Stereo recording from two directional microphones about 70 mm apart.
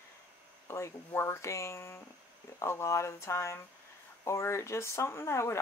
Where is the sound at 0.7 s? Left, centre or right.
Left.